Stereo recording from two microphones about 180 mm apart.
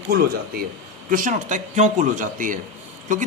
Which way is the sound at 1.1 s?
45° right (ahead or behind).